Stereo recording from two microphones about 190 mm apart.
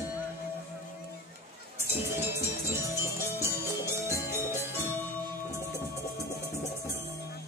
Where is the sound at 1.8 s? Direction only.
10° right (ahead or behind).